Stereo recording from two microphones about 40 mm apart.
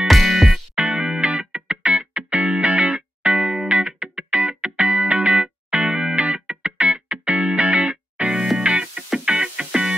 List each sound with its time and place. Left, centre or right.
0.0 s music: centre
0.5 s music: right